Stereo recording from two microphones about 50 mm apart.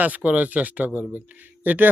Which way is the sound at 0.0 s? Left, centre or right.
Right.